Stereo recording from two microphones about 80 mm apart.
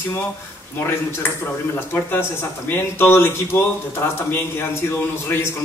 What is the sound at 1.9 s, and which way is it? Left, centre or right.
Speech, left.